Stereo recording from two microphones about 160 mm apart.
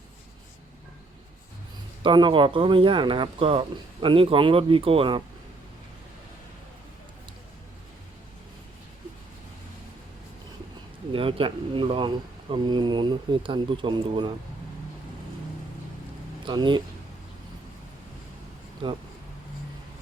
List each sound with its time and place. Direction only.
2.0 s speech: 30° right (ahead or behind)
11.1 s speech: 35° right (ahead or behind)
16.5 s speech: 30° right (ahead or behind)
18.8 s speech: 30° right (ahead or behind)